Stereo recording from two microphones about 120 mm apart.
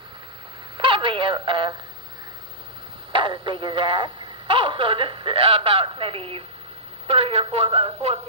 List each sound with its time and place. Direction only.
0.7 s telephone: 45° right (ahead or behind)
3.1 s speech: 45° right (ahead or behind)